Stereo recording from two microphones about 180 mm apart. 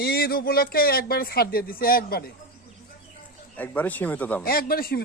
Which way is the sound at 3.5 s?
10° left (ahead or behind).